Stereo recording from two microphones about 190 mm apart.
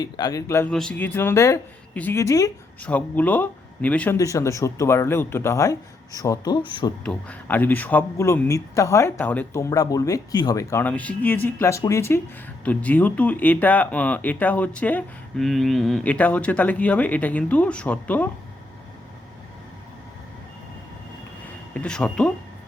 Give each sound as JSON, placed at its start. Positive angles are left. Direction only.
{"t": 0.0, "sound": "speech", "side_deg": 20}
{"t": 0.7, "sound": "speech", "side_deg": 5}
{"t": 7.0, "sound": "speech", "side_deg": 5}
{"t": 21.7, "sound": "speech", "side_deg": 5}